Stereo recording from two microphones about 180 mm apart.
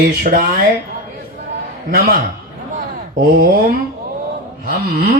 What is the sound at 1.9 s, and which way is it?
Speech, 60° right (ahead or behind).